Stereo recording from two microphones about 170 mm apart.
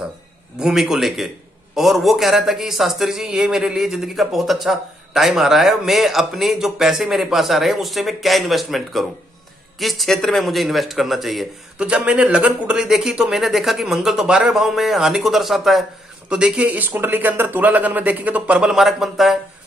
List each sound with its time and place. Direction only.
0.6 s a man's voice: 5° right (ahead or behind)